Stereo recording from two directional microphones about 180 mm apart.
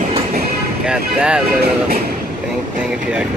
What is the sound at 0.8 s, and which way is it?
Speech, 5° right (ahead or behind).